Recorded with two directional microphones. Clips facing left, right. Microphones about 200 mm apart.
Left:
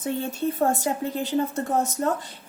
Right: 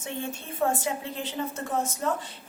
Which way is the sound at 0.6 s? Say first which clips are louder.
Left 1 dB; 40° left (ahead or behind).